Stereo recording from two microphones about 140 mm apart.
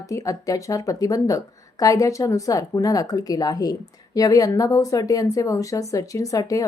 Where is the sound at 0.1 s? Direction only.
25° left (ahead or behind).